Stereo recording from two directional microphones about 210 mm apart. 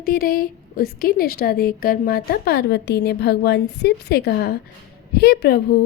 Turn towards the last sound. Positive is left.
turn(degrees=50)  # may be behind; listen again after turning